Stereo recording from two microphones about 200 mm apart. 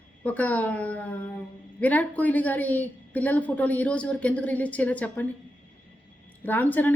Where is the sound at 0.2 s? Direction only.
5° left (ahead or behind).